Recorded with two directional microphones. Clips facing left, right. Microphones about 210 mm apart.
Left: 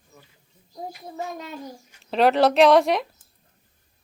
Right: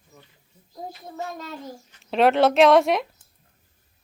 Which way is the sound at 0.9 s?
10° left (ahead or behind).